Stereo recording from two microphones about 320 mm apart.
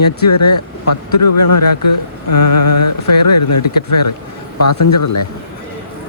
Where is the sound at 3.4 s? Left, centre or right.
Left.